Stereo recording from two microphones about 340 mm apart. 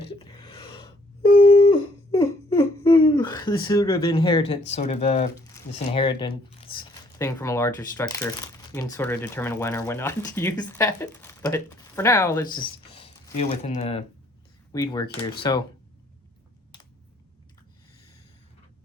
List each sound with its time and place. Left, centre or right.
0.4 s gasp: centre
2.1 s a sound: centre
5.5 s speech: centre